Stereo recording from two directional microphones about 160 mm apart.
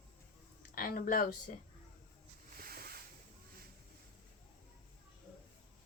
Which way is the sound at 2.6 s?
70° right (ahead or behind).